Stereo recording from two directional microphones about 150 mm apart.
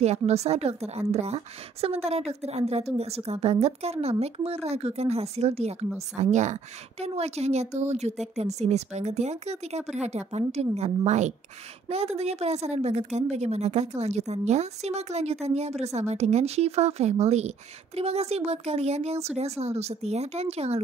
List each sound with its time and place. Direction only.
0.0 s a woman's voice: 45° right (ahead or behind)